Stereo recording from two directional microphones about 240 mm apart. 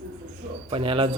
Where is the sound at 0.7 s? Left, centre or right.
Right.